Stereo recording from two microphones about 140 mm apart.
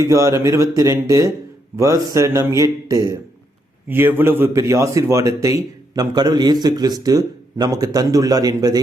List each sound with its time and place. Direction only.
0.0 s a man's voice: 25° right (ahead or behind)